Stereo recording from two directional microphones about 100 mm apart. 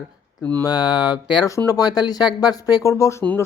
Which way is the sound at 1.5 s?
35° left (ahead or behind).